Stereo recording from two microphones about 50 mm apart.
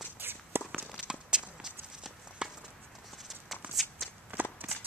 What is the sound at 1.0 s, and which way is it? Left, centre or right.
Walk, centre.